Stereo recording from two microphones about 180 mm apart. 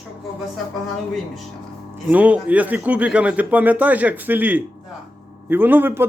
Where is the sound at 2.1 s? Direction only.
10° right (ahead or behind).